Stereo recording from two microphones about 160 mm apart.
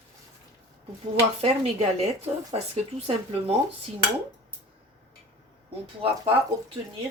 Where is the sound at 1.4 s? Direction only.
35° right (ahead or behind).